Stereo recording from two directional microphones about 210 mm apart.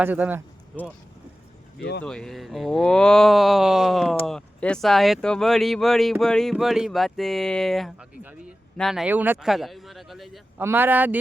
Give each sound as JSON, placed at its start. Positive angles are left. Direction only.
{"t": 0.0, "sound": "speech", "side_deg": -10}
{"t": 1.8, "sound": "speech", "side_deg": 55}
{"t": 2.0, "sound": "speech", "side_deg": 5}